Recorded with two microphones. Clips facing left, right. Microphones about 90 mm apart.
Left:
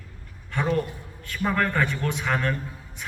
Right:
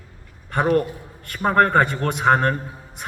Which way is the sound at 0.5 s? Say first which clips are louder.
Right 7 dB; 65° right (ahead or behind).